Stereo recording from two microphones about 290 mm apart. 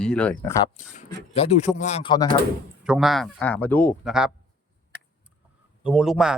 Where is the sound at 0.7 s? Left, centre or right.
Left.